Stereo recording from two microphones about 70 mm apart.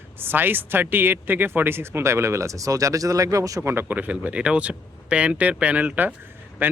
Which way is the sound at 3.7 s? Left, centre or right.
Right.